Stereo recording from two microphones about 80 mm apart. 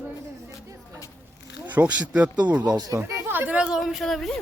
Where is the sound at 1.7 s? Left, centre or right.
Centre.